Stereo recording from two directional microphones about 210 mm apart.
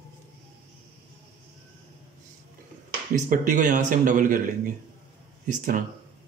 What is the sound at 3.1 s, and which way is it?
Speech, 40° right (ahead or behind).